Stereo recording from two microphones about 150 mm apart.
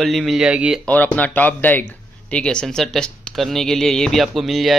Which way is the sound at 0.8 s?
10° left (ahead or behind).